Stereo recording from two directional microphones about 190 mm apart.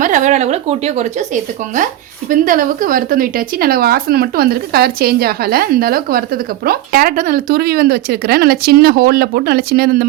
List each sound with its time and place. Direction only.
0.0 s speech: 40° right (ahead or behind)
2.3 s speech: 45° right (ahead or behind)